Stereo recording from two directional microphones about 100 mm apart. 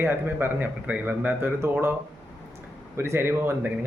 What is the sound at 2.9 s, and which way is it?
Speech, 25° right (ahead or behind).